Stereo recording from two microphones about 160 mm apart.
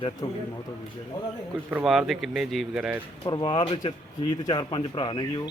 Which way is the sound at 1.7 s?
5° right (ahead or behind).